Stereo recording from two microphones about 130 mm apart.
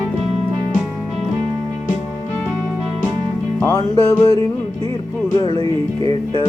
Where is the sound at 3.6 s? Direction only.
30° left (ahead or behind).